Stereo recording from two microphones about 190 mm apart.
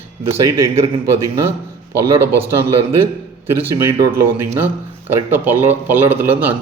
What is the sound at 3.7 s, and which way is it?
A man's voice, 10° right (ahead or behind).